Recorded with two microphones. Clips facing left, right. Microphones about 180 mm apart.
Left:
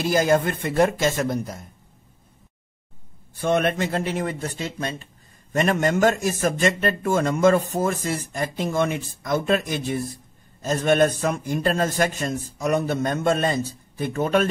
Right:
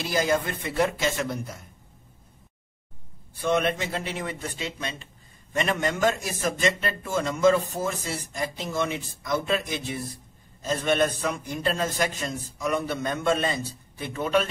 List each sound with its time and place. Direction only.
0.0 s a man's voice: 50° left (ahead or behind)
3.3 s a man's voice: 50° left (ahead or behind)